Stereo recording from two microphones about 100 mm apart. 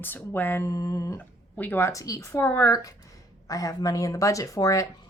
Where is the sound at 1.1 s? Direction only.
20° left (ahead or behind); by 4.9 s 35° left (ahead or behind).